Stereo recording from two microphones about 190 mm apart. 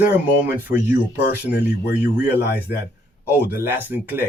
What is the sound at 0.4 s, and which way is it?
Speech, 10° right (ahead or behind).